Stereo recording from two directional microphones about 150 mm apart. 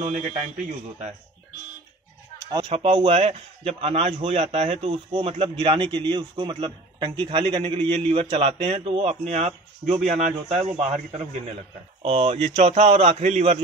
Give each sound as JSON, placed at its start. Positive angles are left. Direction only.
{"t": 2.7, "sound": "a man's voice", "side_deg": -40}